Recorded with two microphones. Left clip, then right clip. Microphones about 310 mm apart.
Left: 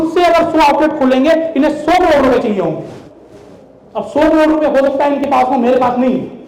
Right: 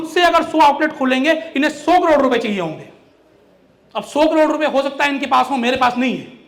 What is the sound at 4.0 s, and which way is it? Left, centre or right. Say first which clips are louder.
A man's voice: left 3 dB; right.